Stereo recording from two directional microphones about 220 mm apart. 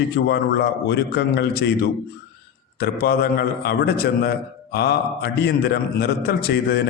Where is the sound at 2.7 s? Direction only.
45° left (ahead or behind).